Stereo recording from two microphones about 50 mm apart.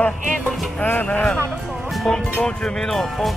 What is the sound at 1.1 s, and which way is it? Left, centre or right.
Speech, left.